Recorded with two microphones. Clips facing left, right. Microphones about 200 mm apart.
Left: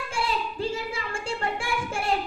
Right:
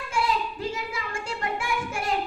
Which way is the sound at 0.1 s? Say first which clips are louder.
Right 3 dB; 30° left (ahead or behind).